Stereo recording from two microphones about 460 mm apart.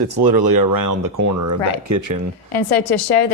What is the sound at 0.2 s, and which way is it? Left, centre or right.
Speech, right.